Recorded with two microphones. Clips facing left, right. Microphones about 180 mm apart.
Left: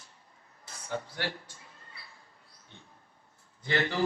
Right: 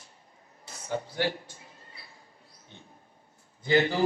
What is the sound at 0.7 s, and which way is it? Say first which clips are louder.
Speech: right 3 dB; 25° right (ahead or behind).